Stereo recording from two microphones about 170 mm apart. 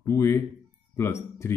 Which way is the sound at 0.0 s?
15° left (ahead or behind).